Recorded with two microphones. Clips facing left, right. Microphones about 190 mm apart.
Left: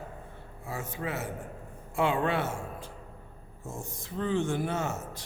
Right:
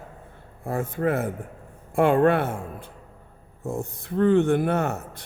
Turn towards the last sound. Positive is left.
turn(degrees=-60)  # may be behind; listen again after turning